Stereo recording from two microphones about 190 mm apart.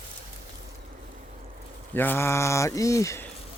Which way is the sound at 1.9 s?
10° left (ahead or behind).